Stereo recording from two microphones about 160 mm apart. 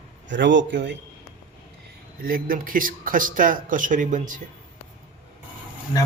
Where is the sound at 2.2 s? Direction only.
65° right (ahead or behind).